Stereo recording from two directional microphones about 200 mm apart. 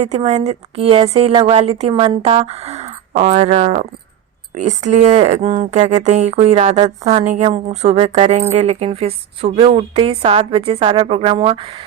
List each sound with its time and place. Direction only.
0.0 s a woman's voice: 35° right (ahead or behind)